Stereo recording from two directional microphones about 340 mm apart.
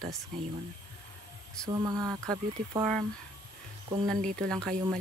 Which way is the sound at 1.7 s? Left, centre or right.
Centre.